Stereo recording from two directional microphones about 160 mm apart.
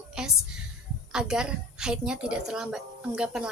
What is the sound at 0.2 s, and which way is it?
A woman's voice, 5° right (ahead or behind).